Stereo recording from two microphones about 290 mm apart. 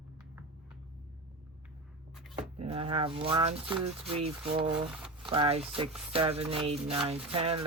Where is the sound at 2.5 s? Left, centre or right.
Centre.